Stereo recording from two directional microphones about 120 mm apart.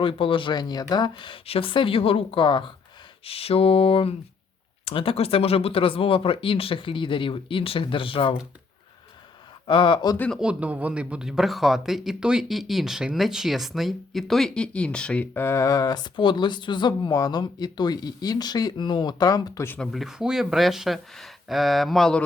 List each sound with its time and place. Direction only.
0.0 s speech: 45° left (ahead or behind)
9.6 s speech: 45° left (ahead or behind)
10.2 s speech: 10° left (ahead or behind)
10.4 s speech: 10° right (ahead or behind); by 19.6 s 35° left (ahead or behind)
19.6 s speech: 15° left (ahead or behind)
19.9 s speech: 5° right (ahead or behind)